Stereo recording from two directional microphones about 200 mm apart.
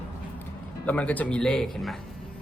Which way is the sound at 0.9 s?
5° left (ahead or behind).